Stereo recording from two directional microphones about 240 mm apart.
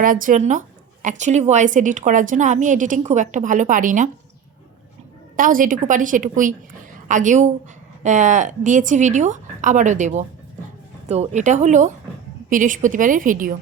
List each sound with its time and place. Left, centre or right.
0.0 s speech: right
5.4 s speech: right